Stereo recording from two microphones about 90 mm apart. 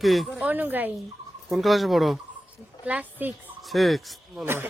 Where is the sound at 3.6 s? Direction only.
Centre (ahead or behind).